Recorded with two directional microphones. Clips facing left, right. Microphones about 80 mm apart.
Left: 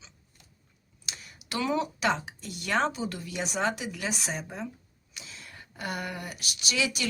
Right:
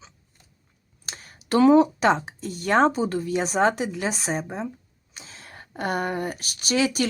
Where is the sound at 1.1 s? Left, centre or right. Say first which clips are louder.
Right 13 dB; right.